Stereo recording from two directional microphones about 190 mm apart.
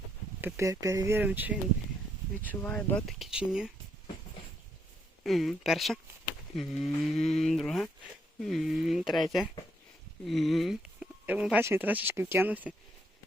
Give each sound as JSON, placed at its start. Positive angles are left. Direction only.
{"t": 0.4, "sound": "speech", "side_deg": -15}
{"t": 2.4, "sound": "speech", "side_deg": 10}
{"t": 5.2, "sound": "speech", "side_deg": 0}